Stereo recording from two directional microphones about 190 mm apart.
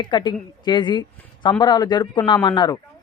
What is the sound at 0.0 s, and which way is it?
Speech, 25° left (ahead or behind).